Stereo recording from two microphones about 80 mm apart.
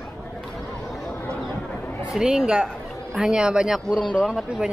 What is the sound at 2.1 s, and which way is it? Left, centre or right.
Speech, centre.